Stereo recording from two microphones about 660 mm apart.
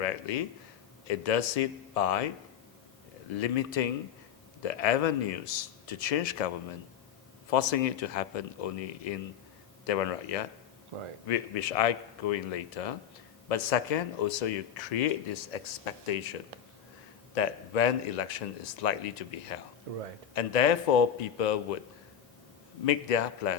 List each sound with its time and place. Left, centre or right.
0.0 s a man's voice: left
3.3 s a man's voice: left
7.5 s a man's voice: left
17.3 s speech: left
22.9 s a man's voice: left